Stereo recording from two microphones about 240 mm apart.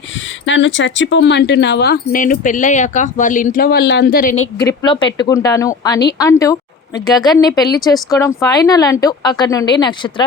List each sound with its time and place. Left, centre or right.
0.4 s speech: left
4.5 s a woman's voice: centre